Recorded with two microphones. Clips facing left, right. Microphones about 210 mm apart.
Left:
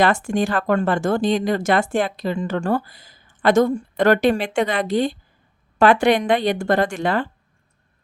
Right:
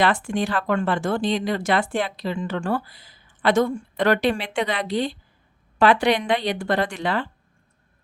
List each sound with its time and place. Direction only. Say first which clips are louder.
0.0 s speech: left 3 dB; 45° left (ahead or behind)